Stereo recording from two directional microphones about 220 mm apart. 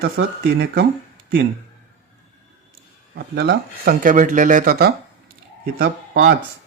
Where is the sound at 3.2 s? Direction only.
45° right (ahead or behind).